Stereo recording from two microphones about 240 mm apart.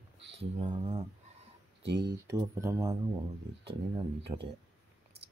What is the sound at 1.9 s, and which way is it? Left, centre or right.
Speech, right.